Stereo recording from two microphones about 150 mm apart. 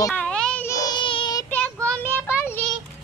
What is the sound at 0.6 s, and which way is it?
Child singing, 25° left (ahead or behind).